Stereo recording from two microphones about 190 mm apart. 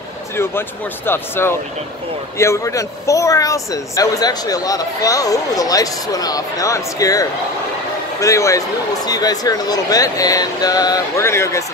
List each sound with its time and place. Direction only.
0.4 s speech: 10° left (ahead or behind)